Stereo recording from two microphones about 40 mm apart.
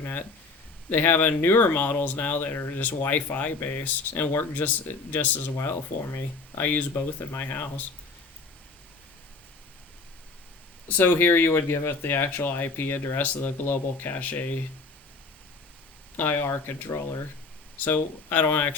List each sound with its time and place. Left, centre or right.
0.0 s speech: left
2.5 s speech: left
10.8 s speech: left
14.1 s speech: left
16.1 s speech: left
17.7 s speech: left